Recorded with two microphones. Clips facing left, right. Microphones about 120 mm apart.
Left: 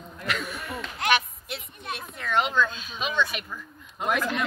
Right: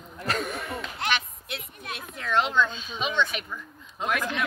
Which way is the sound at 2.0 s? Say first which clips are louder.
Right 1 dB; 5° left (ahead or behind).